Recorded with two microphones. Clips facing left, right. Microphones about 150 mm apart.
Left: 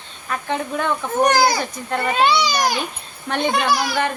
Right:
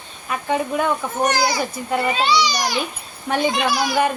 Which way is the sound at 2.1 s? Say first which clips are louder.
Left 6 dB; 50° left (ahead or behind).